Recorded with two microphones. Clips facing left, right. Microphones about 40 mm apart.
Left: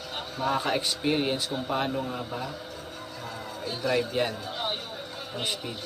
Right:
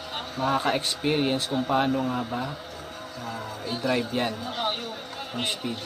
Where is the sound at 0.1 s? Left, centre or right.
Centre.